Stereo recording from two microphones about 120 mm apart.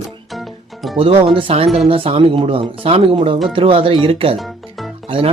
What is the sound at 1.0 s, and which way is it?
Speech, 50° right (ahead or behind).